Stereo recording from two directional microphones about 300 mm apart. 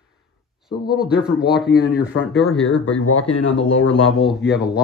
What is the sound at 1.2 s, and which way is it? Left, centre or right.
Speech, centre.